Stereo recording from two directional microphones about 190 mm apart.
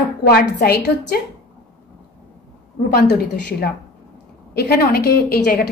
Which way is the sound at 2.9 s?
55° left (ahead or behind).